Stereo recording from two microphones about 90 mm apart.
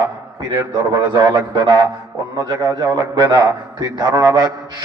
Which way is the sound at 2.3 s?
40° right (ahead or behind).